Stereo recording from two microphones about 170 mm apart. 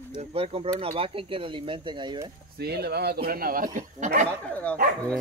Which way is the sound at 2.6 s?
70° right (ahead or behind).